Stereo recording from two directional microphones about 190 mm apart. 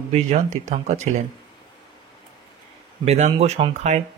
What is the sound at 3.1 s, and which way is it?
Speech, 35° right (ahead or behind).